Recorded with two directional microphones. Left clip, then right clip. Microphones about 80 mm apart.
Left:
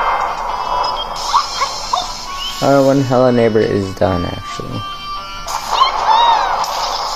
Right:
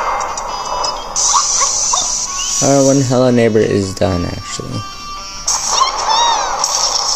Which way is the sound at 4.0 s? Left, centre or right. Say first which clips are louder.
Left 1 dB; right.